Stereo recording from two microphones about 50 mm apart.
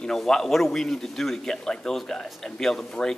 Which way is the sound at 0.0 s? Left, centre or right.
Centre.